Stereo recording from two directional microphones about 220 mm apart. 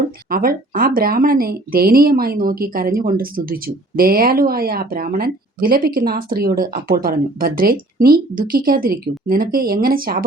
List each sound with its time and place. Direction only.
0.3 s speech: 40° right (ahead or behind)